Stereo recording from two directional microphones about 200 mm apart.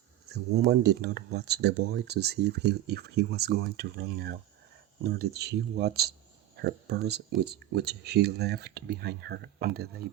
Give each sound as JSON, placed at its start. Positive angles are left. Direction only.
{"t": 0.6, "sound": "speech", "side_deg": -55}